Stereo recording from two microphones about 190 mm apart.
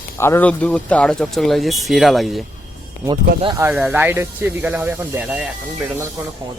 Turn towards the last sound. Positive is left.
turn(degrees=-5)  # may be behind; listen again after turning